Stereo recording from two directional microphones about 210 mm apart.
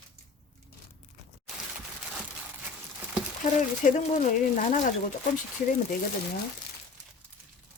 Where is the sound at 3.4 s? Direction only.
35° left (ahead or behind).